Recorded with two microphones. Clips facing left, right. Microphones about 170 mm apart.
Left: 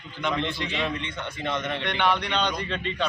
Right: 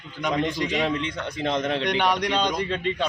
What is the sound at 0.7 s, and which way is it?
A man's voice, 40° right (ahead or behind).